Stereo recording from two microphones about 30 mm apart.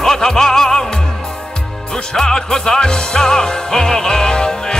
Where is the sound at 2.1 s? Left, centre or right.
Centre.